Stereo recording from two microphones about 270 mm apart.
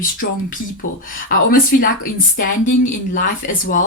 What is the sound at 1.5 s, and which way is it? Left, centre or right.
Speech, left.